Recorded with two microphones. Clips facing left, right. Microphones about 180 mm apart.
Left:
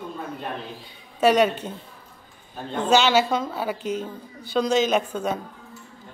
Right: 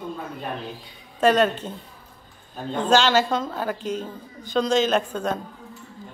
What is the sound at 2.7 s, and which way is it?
Speech, 10° left (ahead or behind).